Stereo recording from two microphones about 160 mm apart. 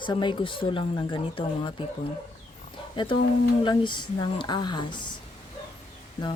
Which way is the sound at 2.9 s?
30° left (ahead or behind).